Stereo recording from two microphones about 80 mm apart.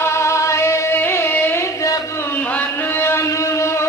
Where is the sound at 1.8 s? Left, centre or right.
Left.